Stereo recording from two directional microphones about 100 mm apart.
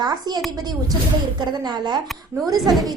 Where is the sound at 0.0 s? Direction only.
45° right (ahead or behind).